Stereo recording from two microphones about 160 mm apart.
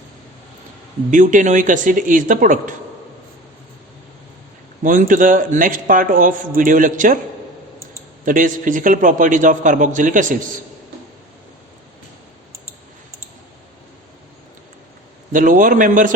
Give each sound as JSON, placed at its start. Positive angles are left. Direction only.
{"t": 1.1, "sound": "a woman's voice", "side_deg": -50}
{"t": 4.8, "sound": "a man's voice", "side_deg": -55}
{"t": 8.2, "sound": "a man's voice", "side_deg": -55}
{"t": 15.3, "sound": "a man's voice", "side_deg": -55}